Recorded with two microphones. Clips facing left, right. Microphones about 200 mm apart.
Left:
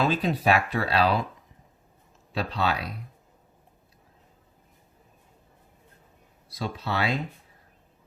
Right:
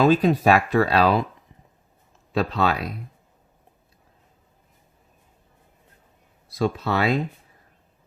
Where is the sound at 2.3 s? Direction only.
50° right (ahead or behind).